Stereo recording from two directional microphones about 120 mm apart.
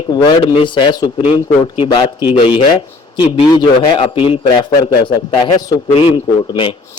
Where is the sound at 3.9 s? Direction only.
50° left (ahead or behind).